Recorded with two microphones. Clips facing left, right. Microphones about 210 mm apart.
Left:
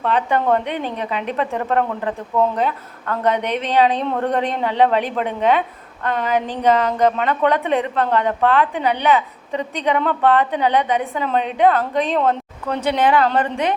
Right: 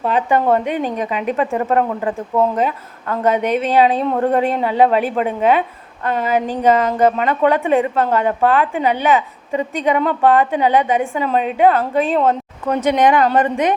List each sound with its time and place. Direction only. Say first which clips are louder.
0.0 s speech: right 2 dB; 10° right (ahead or behind)